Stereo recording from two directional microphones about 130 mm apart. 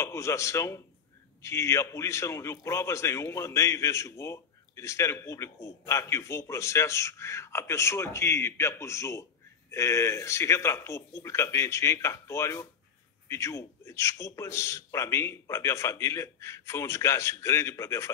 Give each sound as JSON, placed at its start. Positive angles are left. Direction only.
{"t": 0.0, "sound": "a man's voice", "side_deg": 20}